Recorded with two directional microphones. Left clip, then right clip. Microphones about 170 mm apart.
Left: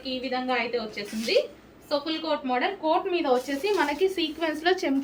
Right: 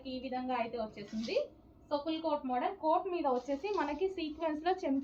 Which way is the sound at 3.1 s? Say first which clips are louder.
Left 9 dB; 25° left (ahead or behind).